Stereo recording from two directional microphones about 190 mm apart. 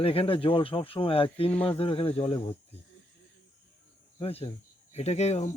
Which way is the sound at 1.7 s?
30° left (ahead or behind).